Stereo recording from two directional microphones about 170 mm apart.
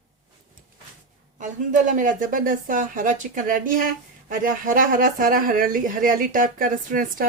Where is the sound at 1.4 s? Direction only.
50° right (ahead or behind).